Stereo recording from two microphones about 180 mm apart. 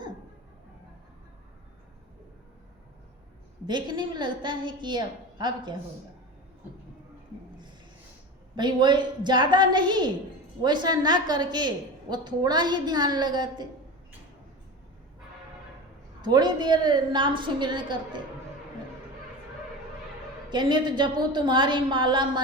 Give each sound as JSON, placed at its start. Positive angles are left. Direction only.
{"t": 3.7, "sound": "a woman's voice", "side_deg": -25}
{"t": 8.5, "sound": "a woman's voice", "side_deg": -25}
{"t": 16.2, "sound": "a woman's voice", "side_deg": -25}
{"t": 20.5, "sound": "a woman's voice", "side_deg": -25}